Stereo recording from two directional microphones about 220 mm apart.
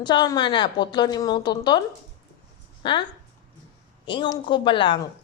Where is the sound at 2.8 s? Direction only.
20° left (ahead or behind).